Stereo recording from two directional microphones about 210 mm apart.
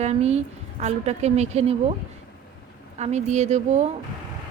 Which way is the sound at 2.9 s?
30° right (ahead or behind).